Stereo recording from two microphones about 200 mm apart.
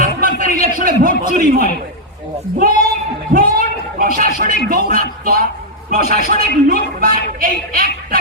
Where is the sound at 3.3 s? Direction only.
45° right (ahead or behind).